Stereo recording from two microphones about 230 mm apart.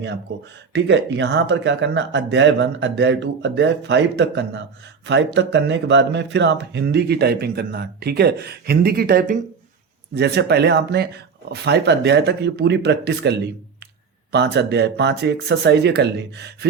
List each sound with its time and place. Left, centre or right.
0.7 s speech: right